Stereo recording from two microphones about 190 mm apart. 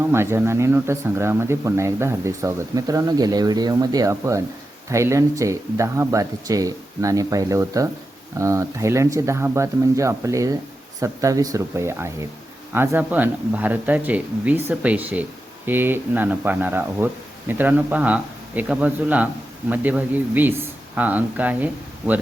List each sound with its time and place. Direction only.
0.0 s speech: 15° right (ahead or behind)